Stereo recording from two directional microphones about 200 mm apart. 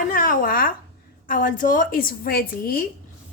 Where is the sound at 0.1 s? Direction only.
45° left (ahead or behind).